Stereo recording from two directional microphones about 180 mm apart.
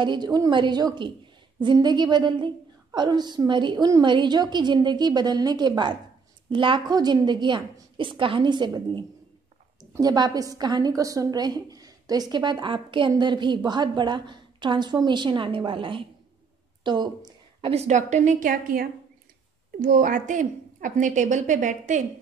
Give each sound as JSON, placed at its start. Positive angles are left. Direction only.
{"t": 0.0, "sound": "a woman's voice", "side_deg": -25}